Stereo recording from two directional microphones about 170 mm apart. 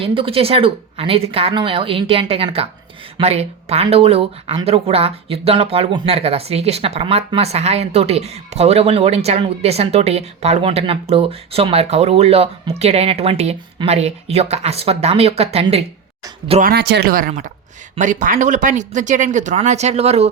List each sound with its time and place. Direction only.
0.0 s speech: 30° right (ahead or behind)
16.6 s speech: 65° right (ahead or behind); by 20.3 s 40° right (ahead or behind)